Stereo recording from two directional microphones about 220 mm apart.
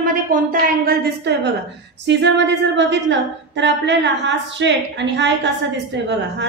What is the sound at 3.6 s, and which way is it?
A woman's voice, 55° right (ahead or behind).